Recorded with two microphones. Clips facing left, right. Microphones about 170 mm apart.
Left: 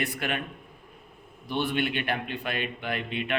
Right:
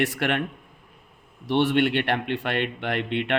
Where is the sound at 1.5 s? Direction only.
80° right.